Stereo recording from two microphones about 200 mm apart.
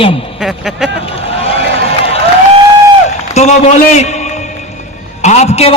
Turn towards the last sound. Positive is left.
turn(degrees=35)  # may be behind; listen again after turning